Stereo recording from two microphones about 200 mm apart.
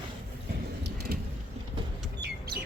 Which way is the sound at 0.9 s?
50° right (ahead or behind).